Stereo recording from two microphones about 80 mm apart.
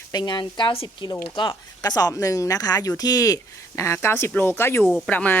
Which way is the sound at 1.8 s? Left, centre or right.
Left.